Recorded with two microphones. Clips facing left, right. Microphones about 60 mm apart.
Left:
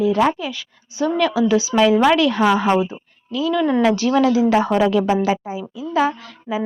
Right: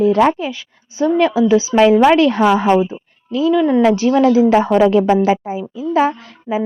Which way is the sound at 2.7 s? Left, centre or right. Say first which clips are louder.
Right 4 dB; right.